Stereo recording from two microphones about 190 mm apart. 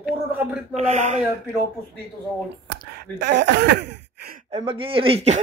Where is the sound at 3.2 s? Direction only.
65° right (ahead or behind).